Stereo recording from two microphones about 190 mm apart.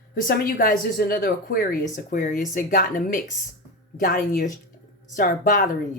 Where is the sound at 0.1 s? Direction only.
50° left (ahead or behind).